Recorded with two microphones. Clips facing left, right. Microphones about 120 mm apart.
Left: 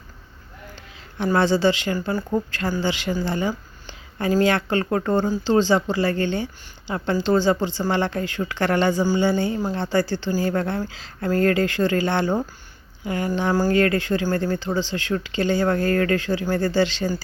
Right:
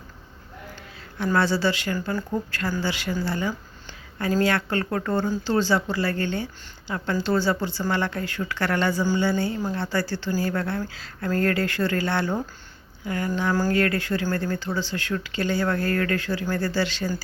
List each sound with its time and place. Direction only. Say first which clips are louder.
1.2 s a woman's voice: left 4 dB; 25° left (ahead or behind)